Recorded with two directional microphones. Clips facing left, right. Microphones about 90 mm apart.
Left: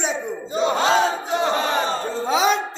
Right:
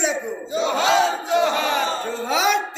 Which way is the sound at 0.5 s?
40° left (ahead or behind).